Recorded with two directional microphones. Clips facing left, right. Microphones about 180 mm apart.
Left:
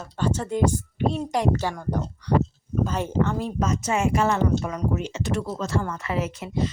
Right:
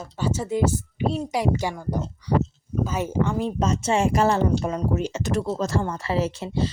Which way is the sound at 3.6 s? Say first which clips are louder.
Right 2 dB; 30° right (ahead or behind).